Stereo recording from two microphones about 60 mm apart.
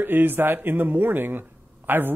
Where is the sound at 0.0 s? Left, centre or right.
Right.